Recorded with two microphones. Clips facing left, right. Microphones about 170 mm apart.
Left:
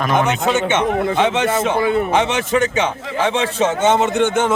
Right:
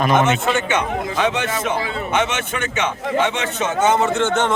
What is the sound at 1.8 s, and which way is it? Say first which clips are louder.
Speech: left 9 dB; 55° left (ahead or behind).